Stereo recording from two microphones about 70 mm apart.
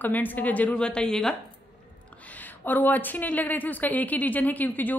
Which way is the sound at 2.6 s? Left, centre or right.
Left.